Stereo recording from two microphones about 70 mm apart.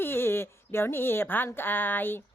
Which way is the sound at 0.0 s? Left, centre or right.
Left.